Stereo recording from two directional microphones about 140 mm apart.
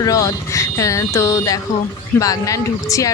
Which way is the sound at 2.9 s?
25° left (ahead or behind).